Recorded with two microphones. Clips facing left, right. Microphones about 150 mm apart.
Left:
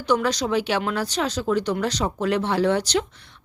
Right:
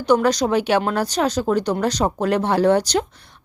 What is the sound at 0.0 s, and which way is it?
Speech, 45° right (ahead or behind).